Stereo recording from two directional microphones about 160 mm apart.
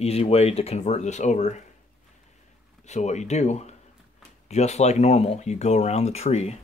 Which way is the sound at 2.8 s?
45° left (ahead or behind).